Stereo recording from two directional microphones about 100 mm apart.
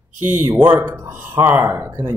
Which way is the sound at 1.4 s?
50° right (ahead or behind).